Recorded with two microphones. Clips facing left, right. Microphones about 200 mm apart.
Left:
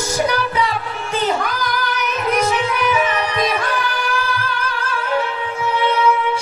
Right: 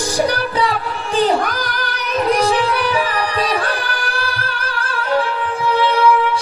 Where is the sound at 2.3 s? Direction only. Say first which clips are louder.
Right 2 dB; 35° right (ahead or behind).